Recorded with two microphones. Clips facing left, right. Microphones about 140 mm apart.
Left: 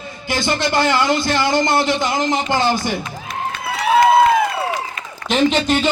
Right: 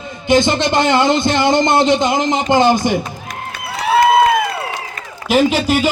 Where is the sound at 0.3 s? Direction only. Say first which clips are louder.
Right 6 dB; 20° right (ahead or behind).